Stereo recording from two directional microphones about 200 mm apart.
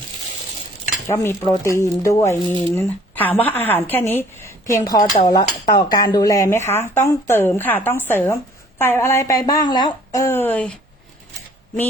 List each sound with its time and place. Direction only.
1.0 s speech: 15° left (ahead or behind)